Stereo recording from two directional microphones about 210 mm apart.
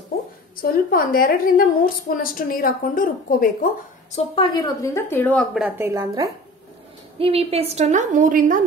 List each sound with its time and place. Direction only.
0.6 s a woman's voice: 45° left (ahead or behind)
4.1 s speech: 20° left (ahead or behind); by 5.7 s centre (ahead or behind)
5.8 s speech: 15° right (ahead or behind)
7.2 s a woman's voice: 25° right (ahead or behind)